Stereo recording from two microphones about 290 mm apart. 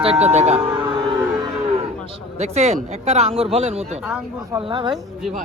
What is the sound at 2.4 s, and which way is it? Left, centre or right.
Speech, right.